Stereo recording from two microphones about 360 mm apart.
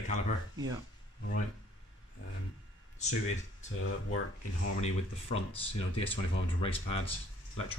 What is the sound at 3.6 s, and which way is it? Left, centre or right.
Speech, left.